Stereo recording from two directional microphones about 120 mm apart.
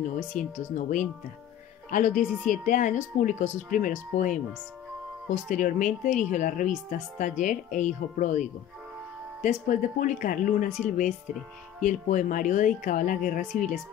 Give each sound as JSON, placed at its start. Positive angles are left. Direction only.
{"t": 0.4, "sound": "speech", "side_deg": 90}